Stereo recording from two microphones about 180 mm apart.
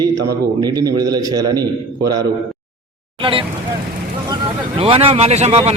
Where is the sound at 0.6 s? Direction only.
20° right (ahead or behind).